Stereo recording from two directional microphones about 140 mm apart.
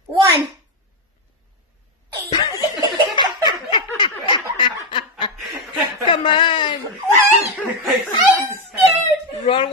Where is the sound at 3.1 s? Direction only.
35° left (ahead or behind).